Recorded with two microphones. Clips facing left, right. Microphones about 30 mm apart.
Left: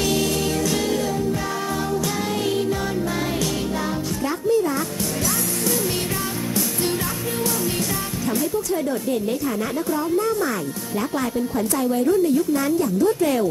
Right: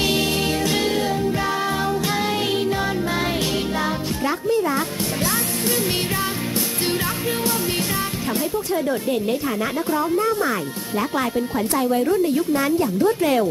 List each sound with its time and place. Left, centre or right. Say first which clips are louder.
0.0 s music: right 1 dB; right
4.5 s music: left 2 dB; right
11.0 s speech: right 2 dB; right
12.4 s speech: right 1 dB; right